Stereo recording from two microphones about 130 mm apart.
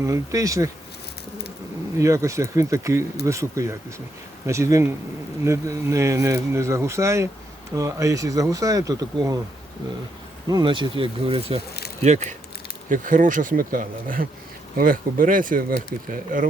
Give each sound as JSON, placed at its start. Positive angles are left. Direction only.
{"t": 0.0, "sound": "speech", "side_deg": -25}
{"t": 2.0, "sound": "speech", "side_deg": -25}
{"t": 10.5, "sound": "speech", "side_deg": -35}
{"t": 12.0, "sound": "speech", "side_deg": -60}
{"t": 12.9, "sound": "speech", "side_deg": -90}